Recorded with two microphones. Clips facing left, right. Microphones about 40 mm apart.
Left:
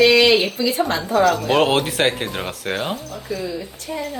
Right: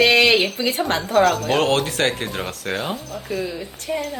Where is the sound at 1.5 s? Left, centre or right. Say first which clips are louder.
Left 2 dB; centre.